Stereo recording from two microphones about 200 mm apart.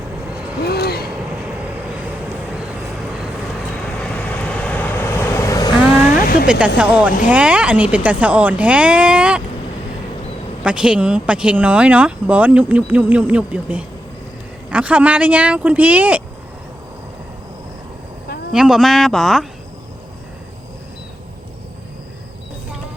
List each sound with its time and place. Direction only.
0.6 s vehicle: 50° left (ahead or behind)
4.0 s vehicle: 5° left (ahead or behind)
6.2 s a sound: 45° left (ahead or behind)
6.7 s speech: 5° right (ahead or behind)
10.6 s speech: 5° right (ahead or behind)
18.5 s speech: centre (ahead or behind)